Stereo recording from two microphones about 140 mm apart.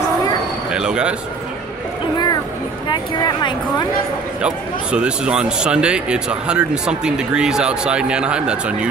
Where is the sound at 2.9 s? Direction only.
30° left (ahead or behind).